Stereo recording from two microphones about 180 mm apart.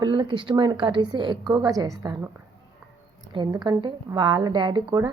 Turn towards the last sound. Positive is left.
turn(degrees=-25)  # may be behind; listen again after turning